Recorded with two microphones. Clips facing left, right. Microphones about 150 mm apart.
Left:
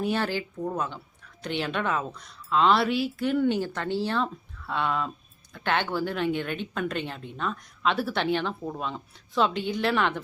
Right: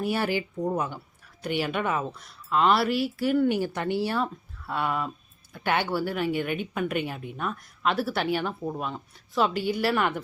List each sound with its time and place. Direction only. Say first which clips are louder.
0.0 s a woman's voice: right 1 dB; 10° right (ahead or behind)